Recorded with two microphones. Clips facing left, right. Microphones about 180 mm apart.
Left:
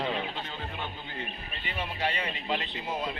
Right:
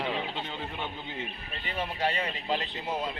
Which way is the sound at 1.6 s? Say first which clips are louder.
Right 2 dB; 40° right (ahead or behind).